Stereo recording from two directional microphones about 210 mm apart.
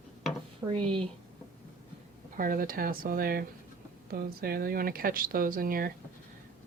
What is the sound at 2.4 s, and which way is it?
Speech, 40° right (ahead or behind).